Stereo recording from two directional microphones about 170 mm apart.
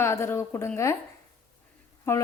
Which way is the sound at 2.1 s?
15° left (ahead or behind).